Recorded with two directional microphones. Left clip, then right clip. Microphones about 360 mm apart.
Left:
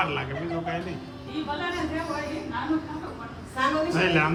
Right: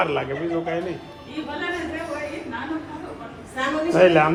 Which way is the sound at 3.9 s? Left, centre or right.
Centre.